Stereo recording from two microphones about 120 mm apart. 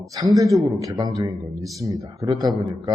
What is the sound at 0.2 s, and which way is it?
A man's voice, 30° right (ahead or behind).